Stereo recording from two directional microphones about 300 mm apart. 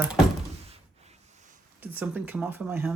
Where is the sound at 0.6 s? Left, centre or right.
Right.